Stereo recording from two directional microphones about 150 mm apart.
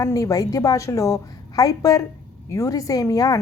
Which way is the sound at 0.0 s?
20° left (ahead or behind).